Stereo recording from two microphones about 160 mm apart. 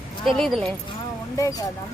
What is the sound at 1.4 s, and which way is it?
Speech, 20° left (ahead or behind).